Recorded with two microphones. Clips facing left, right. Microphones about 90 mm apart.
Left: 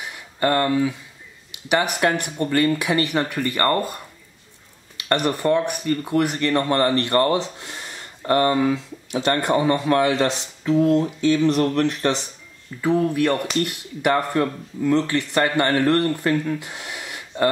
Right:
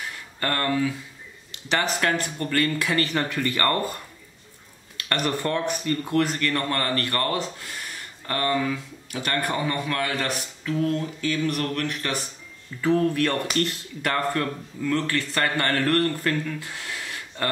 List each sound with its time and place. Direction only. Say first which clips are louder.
0.0 s a sound: left 7 dB; 15° left (ahead or behind)
1.5 s speech: left 4 dB; 15° left (ahead or behind)
5.0 s speech: left 5 dB; 20° left (ahead or behind)
12.8 s speech: left 2 dB; 10° left (ahead or behind)